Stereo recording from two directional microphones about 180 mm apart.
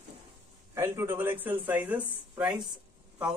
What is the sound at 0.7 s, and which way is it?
Speech, 15° right (ahead or behind).